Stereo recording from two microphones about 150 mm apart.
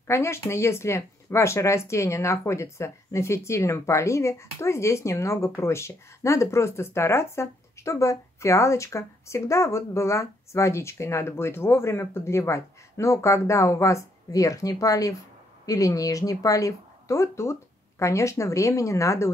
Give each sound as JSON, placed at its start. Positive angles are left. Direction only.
{"t": 0.0, "sound": "speech", "side_deg": 15}